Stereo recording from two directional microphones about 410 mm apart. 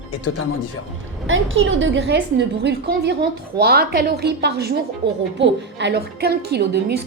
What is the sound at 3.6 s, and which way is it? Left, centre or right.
A woman's voice, right.